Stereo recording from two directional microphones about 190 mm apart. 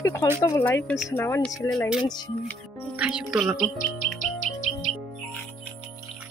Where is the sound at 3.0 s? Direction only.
5° right (ahead or behind).